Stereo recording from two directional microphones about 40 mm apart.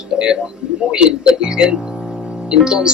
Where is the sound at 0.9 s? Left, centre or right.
Right.